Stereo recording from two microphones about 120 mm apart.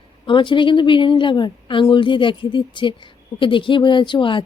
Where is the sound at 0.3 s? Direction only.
40° left (ahead or behind).